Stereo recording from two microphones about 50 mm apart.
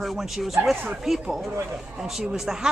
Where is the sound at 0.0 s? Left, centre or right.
Centre.